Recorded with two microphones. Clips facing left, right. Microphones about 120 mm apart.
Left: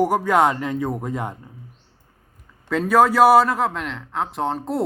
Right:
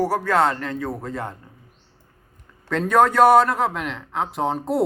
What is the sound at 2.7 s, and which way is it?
A man's voice, 5° left (ahead or behind).